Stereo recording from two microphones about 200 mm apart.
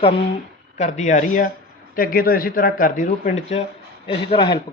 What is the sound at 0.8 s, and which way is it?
A man's voice, 35° left (ahead or behind).